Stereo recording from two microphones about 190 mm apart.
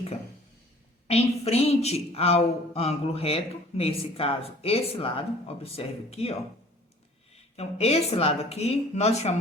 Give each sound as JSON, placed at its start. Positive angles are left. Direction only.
{"t": 1.0, "sound": "a woman's voice", "side_deg": 30}
{"t": 7.5, "sound": "a woman's voice", "side_deg": 35}